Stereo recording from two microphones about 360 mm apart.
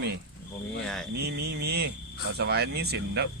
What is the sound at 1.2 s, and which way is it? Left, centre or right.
Speech, right.